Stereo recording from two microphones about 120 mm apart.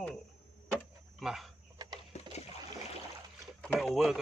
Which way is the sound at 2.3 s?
65° left (ahead or behind).